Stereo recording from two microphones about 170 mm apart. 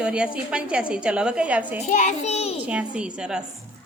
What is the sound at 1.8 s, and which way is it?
Speech, 45° left (ahead or behind).